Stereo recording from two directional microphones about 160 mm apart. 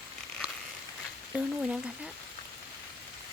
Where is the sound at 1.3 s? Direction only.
5° right (ahead or behind).